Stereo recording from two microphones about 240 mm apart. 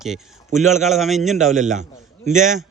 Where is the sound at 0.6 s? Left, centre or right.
Right.